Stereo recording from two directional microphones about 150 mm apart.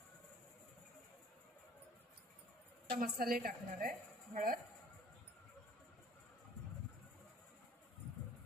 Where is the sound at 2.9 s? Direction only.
75° right (ahead or behind).